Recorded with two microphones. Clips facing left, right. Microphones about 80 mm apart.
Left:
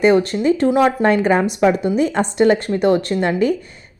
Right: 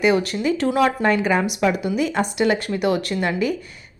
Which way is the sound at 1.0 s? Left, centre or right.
Left.